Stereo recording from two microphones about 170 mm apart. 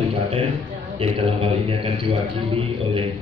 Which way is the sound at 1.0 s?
35° right (ahead or behind).